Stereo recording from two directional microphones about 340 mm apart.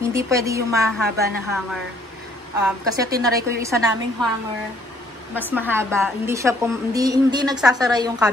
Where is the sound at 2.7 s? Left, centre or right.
Centre.